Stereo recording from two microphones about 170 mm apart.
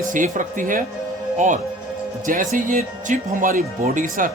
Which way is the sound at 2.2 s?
50° right (ahead or behind).